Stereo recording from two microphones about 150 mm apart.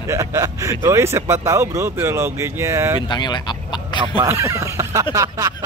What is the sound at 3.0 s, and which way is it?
Speech, 30° left (ahead or behind).